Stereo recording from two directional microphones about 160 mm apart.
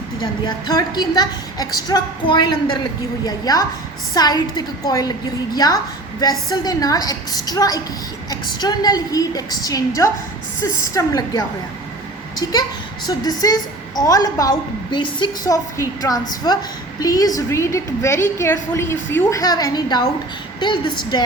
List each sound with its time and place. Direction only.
0.4 s a woman's voice: 25° left (ahead or behind)